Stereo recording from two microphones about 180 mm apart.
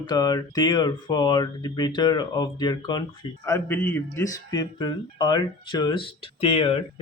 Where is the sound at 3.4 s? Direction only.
10° left (ahead or behind).